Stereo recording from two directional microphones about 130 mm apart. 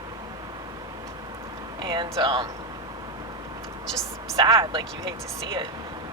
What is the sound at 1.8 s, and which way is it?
Speech, 35° right (ahead or behind).